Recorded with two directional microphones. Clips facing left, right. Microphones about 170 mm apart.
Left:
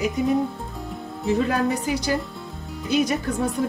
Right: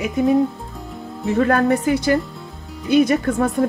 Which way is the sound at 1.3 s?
60° right (ahead or behind).